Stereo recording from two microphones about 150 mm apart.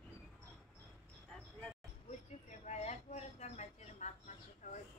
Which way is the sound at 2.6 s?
50° left (ahead or behind).